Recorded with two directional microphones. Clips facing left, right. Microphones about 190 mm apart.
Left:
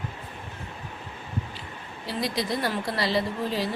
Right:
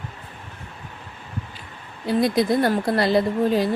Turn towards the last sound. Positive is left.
turn(degrees=-50)  # may be behind; listen again after turning